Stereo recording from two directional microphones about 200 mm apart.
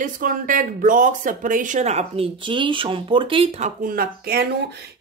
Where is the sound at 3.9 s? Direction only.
50° right (ahead or behind).